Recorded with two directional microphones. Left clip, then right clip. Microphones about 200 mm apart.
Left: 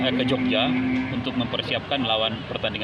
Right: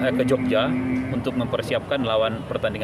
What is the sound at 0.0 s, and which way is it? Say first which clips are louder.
Speech: right 2 dB; 15° right (ahead or behind).